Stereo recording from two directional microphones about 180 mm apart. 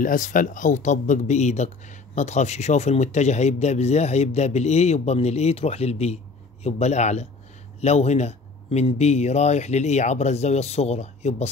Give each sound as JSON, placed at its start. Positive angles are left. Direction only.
{"t": 0.0, "sound": "speech", "side_deg": 45}